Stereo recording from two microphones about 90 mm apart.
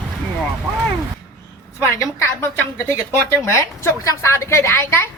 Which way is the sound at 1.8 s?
30° left (ahead or behind).